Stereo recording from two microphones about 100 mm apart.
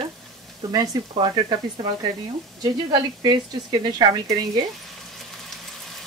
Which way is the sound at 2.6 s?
45° right (ahead or behind).